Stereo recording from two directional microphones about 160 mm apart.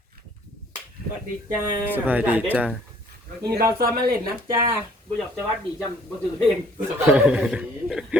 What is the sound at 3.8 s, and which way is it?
Speech, 70° right (ahead or behind).